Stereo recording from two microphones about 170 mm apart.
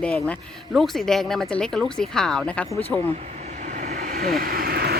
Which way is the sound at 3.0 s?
40° right (ahead or behind).